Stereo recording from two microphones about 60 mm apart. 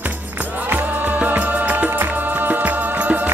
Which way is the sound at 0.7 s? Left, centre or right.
Right.